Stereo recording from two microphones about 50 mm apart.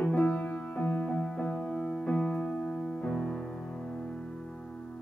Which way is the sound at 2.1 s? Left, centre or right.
Left.